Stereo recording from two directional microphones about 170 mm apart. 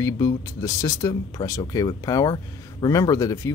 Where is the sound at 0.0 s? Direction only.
20° left (ahead or behind).